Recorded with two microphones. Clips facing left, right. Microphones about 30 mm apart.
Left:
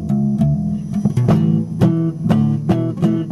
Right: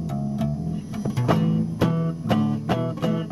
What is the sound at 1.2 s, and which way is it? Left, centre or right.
Music, centre.